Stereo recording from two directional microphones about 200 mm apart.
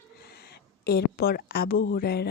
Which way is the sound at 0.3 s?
55° left (ahead or behind).